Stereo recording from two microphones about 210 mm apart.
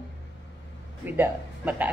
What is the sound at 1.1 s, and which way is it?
Speech, 10° right (ahead or behind).